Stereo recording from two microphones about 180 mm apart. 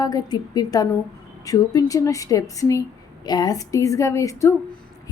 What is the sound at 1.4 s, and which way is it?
Speech, 20° left (ahead or behind).